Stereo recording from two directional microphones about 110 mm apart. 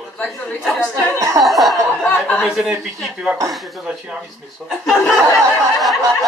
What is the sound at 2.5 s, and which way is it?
Speech, 5° right (ahead or behind).